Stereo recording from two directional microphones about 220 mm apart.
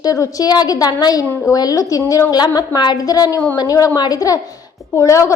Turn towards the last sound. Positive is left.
turn(degrees=15)  # may be behind; listen again after turning